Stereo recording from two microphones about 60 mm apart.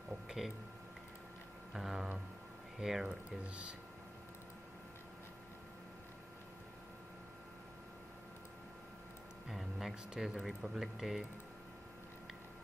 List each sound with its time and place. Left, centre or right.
0.4 s speech: centre
1.7 s music: centre
2.8 s speech: centre
3.3 s speech: centre
9.5 s speech: centre